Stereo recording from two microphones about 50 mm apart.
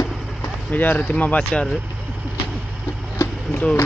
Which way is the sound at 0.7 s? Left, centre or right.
Left.